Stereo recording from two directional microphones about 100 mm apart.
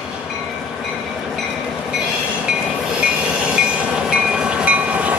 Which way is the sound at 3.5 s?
10° right (ahead or behind).